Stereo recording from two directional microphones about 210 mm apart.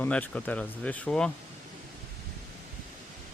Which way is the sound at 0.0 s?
5° left (ahead or behind).